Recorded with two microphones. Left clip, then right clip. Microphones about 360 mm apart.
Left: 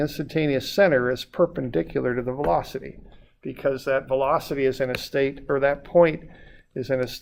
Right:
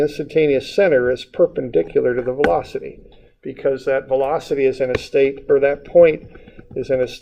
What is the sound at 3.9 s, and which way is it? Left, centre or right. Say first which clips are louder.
Speech: right 3 dB; left.